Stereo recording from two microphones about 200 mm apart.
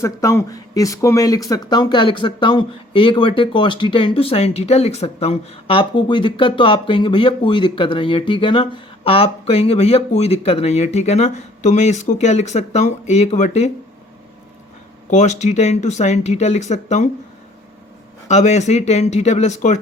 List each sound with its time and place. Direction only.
0.0 s speech: 15° left (ahead or behind); by 13.7 s 35° left (ahead or behind)
15.1 s speech: 35° left (ahead or behind)
18.3 s speech: 35° left (ahead or behind)